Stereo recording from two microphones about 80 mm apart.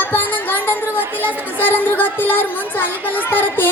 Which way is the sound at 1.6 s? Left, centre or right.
Left.